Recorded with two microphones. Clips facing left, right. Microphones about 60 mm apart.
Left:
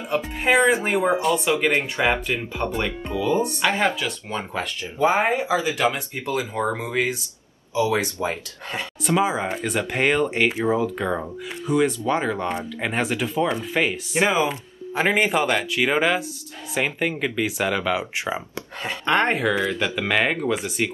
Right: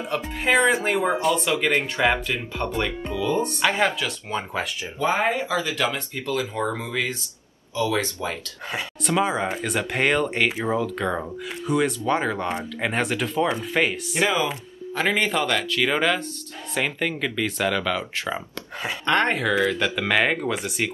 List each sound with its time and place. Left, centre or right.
0.1 s speech: centre
4.9 s speech: centre
8.7 s speech: centre
14.9 s speech: centre